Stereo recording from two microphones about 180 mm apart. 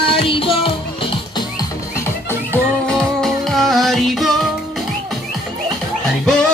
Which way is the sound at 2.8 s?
5° left (ahead or behind).